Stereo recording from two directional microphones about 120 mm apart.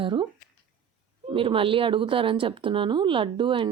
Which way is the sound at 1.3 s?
50° right (ahead or behind).